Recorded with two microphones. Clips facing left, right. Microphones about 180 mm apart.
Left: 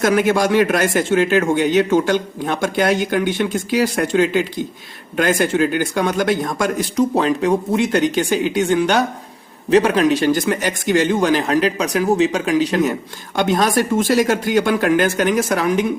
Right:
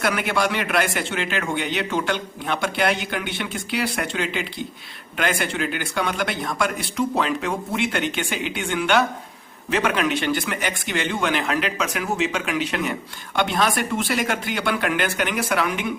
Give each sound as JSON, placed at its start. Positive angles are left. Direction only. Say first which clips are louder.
{"t": 0.0, "sound": "a man's voice", "louder": "left 7 dB", "side_deg": 40}